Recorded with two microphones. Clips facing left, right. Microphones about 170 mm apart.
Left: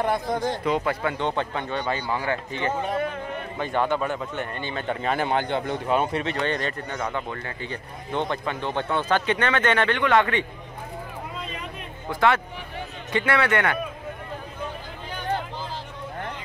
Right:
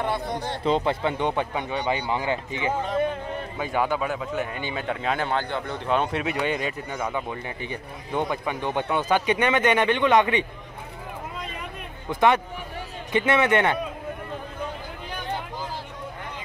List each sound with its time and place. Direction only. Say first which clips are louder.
0.0 s speech: left 3 dB; 45° left (ahead or behind)
0.4 s speech: even; 30° right (ahead or behind); by 4.8 s 10° right (ahead or behind)
4.8 s speech: left 2 dB; centre (ahead or behind)
5.2 s a man's voice: left 2 dB; 15° left (ahead or behind)
5.9 s speech: even; 5° left (ahead or behind)
6.2 s speech: even; 10° right (ahead or behind)
12.1 s a man's voice: right 1 dB; 20° right (ahead or behind)